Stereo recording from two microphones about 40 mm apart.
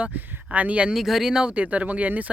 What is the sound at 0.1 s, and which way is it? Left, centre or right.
Speech, right.